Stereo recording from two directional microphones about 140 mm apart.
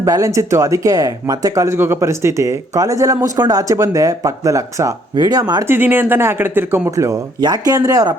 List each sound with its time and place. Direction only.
0.0 s speech: 25° right (ahead or behind)
5.6 s speech: 15° right (ahead or behind)